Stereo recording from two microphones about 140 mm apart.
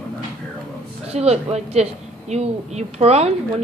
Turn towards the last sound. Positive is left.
turn(degrees=-50)  # may be behind; listen again after turning